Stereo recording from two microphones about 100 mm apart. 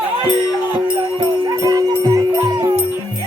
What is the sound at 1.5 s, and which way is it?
Music, 35° right (ahead or behind).